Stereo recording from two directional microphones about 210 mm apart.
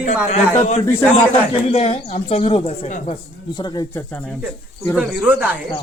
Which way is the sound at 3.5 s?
20° left (ahead or behind).